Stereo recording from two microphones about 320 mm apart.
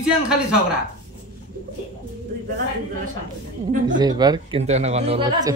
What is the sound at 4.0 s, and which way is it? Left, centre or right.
Speech, centre.